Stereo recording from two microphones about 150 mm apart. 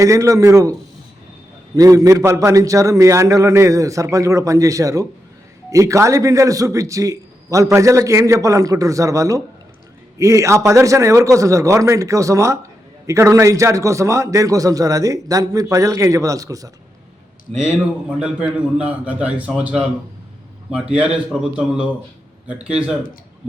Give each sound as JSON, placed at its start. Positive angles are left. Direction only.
{"t": 0.0, "sound": "a man's voice", "side_deg": -20}
{"t": 18.2, "sound": "a man's voice", "side_deg": -10}
{"t": 20.9, "sound": "a man's voice", "side_deg": -10}